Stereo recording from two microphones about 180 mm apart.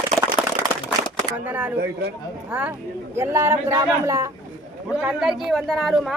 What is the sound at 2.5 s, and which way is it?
A woman's voice, 10° right (ahead or behind).